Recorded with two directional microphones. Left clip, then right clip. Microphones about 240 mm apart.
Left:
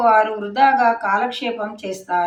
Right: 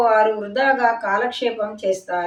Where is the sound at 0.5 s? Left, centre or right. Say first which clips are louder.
Left 4 dB; centre.